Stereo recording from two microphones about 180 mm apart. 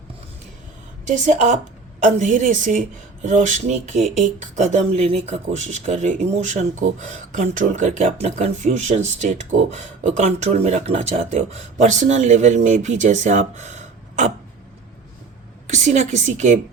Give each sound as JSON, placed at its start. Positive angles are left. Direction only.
{"t": 1.0, "sound": "a woman's voice", "side_deg": -40}
{"t": 15.6, "sound": "speech", "side_deg": -40}